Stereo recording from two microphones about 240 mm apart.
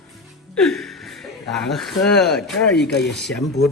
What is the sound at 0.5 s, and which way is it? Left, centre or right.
Speech, centre.